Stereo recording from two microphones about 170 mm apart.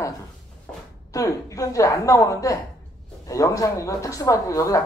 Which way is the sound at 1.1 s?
20° left (ahead or behind).